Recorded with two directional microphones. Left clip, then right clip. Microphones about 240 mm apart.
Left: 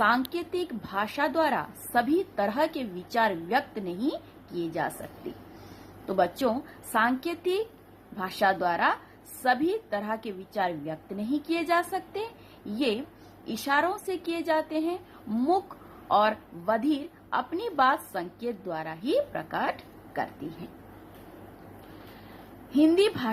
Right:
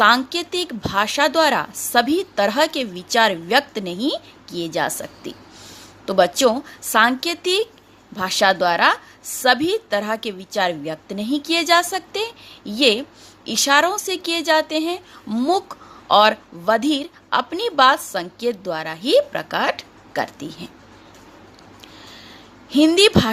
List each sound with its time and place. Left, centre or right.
0.0 s speech: right
6.1 s speech: right
22.7 s speech: right